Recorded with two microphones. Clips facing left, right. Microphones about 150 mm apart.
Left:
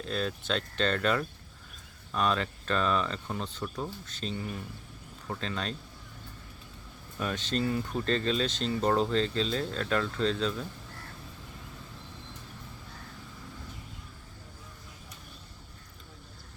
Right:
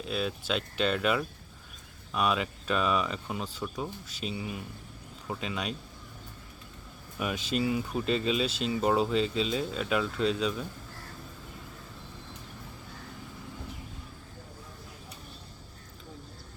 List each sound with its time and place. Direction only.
0.0 s speech: 5° right (ahead or behind)
7.2 s speech: 10° right (ahead or behind)